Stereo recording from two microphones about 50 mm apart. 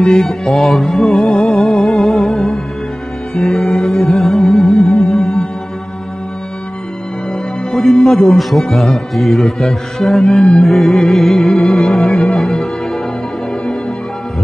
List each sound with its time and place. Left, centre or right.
0.0 s music: centre
7.7 s music: centre